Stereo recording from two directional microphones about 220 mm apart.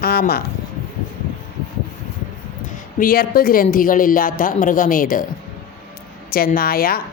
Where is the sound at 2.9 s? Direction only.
40° left (ahead or behind).